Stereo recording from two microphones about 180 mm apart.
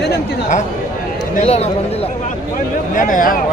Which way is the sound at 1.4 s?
35° left (ahead or behind).